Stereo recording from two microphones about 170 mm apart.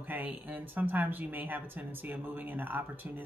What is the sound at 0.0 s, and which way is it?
Speech, 10° right (ahead or behind).